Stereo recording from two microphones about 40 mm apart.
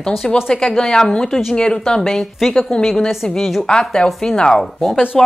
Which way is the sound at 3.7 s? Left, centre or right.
Centre.